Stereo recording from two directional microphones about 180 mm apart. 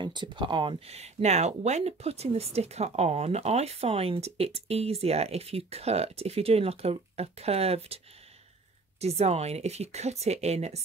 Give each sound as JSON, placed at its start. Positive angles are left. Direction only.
{"t": 0.0, "sound": "speech", "side_deg": -25}
{"t": 9.0, "sound": "speech", "side_deg": -35}